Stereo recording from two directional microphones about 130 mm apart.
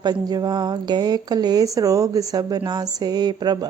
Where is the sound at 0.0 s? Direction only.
30° right (ahead or behind).